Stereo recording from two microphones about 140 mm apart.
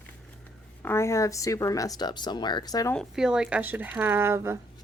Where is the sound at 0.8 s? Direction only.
15° left (ahead or behind).